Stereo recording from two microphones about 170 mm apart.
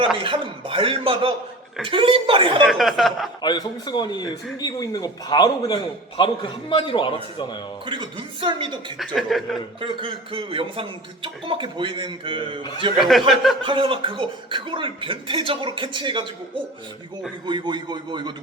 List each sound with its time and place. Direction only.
0.2 s speech: 30° right (ahead or behind)
2.6 s speech: centre (ahead or behind)
3.4 s a man's voice: 25° left (ahead or behind)
7.9 s a man's voice: 30° right (ahead or behind)
9.1 s speech: centre (ahead or behind)
9.8 s a man's voice: 30° right (ahead or behind)
13.0 s speech: centre (ahead or behind)
13.6 s a man's voice: 30° right (ahead or behind)
17.4 s a man's voice: 25° right (ahead or behind)